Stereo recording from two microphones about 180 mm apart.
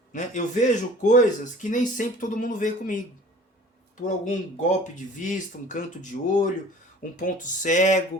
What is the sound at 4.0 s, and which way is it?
Speech, 45° left (ahead or behind).